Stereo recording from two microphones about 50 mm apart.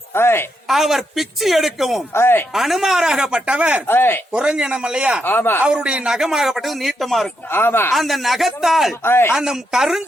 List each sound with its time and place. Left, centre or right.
0.1 s a woman's voice: left
0.7 s a woman's voice: centre
2.1 s speech: left
2.5 s speech: centre; by 3.8 s right
3.8 s speech: left
4.3 s speech: centre
5.2 s speech: left
5.6 s speech: centre
6.1 s a woman's voice: centre
7.5 s speech: left
7.9 s a woman's voice: centre
9.0 s speech: left
9.3 s speech: centre